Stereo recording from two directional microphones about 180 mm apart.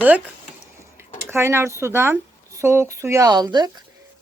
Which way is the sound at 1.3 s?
15° right (ahead or behind).